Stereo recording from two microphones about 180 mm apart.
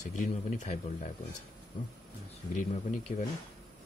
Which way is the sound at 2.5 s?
40° left (ahead or behind).